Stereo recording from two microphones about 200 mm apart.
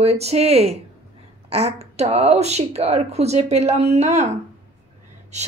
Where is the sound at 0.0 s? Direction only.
30° right (ahead or behind).